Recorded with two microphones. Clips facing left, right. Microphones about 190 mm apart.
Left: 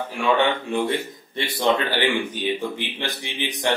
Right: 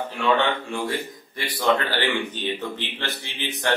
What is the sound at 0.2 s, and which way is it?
A man's voice, 20° left (ahead or behind).